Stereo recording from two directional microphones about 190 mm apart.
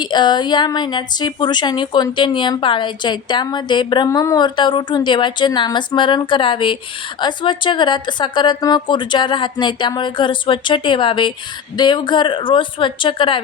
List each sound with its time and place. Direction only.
0.0 s a woman's voice: 25° left (ahead or behind)